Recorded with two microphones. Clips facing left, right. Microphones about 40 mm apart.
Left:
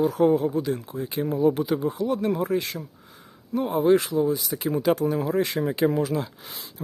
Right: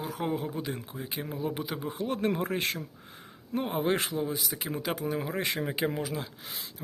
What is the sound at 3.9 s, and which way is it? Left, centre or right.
Speech, right.